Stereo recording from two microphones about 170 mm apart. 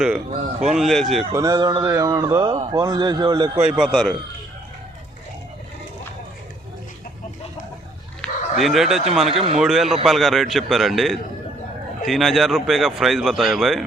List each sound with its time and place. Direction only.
0.6 s speech: centre (ahead or behind)
1.3 s a man's voice: 20° right (ahead or behind)
3.6 s speech: 5° right (ahead or behind)
8.2 s bow-wow: centre (ahead or behind)
9.3 s speech: 35° right (ahead or behind)
9.6 s speech: centre (ahead or behind)